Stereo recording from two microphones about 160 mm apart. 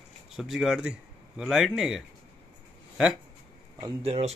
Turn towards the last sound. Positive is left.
turn(degrees=-40)  # may be behind; listen again after turning